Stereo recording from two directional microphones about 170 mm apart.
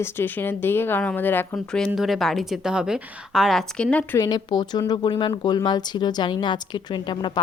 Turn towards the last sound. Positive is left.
turn(degrees=25)  # may be behind; listen again after turning